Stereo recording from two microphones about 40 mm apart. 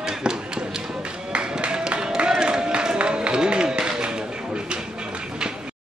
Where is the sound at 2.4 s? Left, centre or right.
Centre.